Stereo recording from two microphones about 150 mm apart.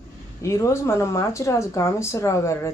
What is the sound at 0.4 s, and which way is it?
Speech, 20° left (ahead or behind).